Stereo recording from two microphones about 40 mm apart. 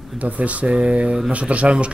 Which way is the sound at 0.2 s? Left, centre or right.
Right.